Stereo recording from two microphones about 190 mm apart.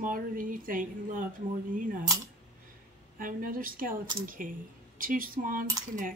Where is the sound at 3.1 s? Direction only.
45° right (ahead or behind).